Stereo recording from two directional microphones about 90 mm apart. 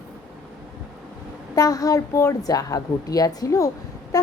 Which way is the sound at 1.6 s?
40° left (ahead or behind).